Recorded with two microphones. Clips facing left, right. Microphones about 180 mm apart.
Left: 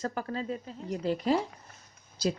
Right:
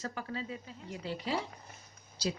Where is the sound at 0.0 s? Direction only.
50° left (ahead or behind).